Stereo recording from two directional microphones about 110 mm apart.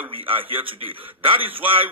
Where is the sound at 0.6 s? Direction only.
55° right (ahead or behind).